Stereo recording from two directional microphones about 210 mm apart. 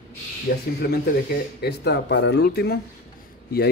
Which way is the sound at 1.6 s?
50° left (ahead or behind).